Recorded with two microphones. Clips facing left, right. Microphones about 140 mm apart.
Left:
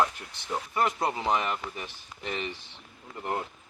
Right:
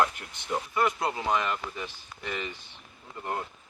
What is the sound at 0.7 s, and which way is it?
Speech, 20° left (ahead or behind).